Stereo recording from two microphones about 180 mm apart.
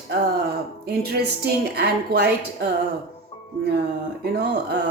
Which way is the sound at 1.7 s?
60° right (ahead or behind).